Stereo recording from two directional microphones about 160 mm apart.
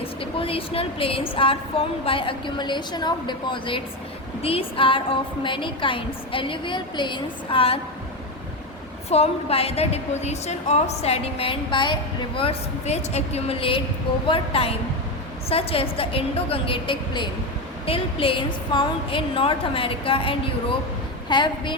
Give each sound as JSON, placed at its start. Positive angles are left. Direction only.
{"t": 0.0, "sound": "a woman's voice", "side_deg": 35}
{"t": 9.0, "sound": "a woman's voice", "side_deg": 40}
{"t": 12.4, "sound": "a woman's voice", "side_deg": 40}